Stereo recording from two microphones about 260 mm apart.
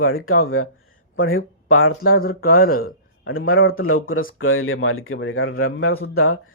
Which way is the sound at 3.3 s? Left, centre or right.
Left.